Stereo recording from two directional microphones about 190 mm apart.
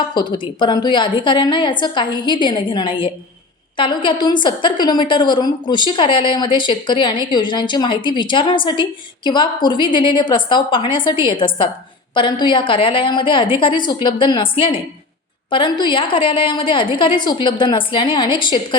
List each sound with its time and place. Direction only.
0.1 s a woman's voice: 25° left (ahead or behind)